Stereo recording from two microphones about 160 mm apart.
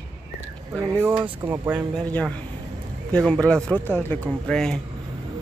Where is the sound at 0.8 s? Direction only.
15° right (ahead or behind).